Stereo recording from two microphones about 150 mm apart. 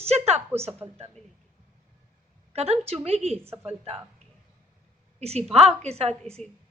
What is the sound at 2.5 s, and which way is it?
A woman's voice, 45° right (ahead or behind).